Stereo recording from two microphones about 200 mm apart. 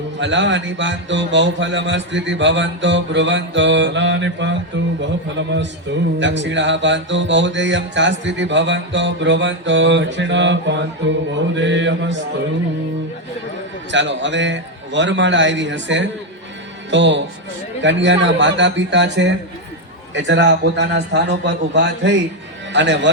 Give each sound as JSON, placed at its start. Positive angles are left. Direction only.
{"t": 0.2, "sound": "music", "side_deg": -65}
{"t": 13.9, "sound": "music", "side_deg": -65}